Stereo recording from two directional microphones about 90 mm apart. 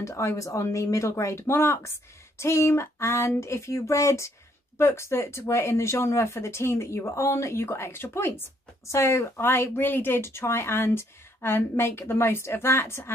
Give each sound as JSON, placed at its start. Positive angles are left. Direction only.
{"t": 0.0, "sound": "speech", "side_deg": 35}